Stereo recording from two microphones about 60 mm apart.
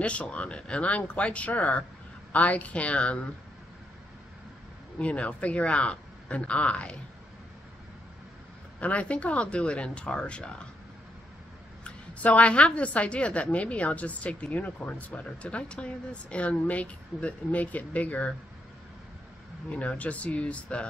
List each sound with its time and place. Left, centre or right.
0.0 s a woman's voice: left
4.9 s a woman's voice: left
8.7 s a woman's voice: left
11.8 s a woman's voice: left
19.7 s a woman's voice: left